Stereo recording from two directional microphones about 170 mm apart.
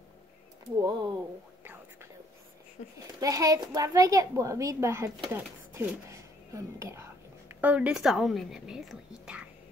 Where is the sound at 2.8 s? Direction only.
40° left (ahead or behind).